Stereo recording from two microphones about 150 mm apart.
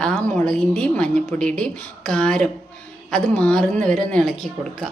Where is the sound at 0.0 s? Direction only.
5° left (ahead or behind).